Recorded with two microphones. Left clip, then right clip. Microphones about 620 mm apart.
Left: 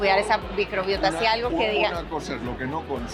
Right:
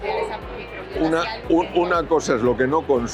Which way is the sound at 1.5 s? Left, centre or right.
Right.